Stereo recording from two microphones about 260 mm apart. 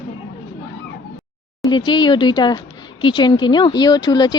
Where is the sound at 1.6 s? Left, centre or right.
Centre.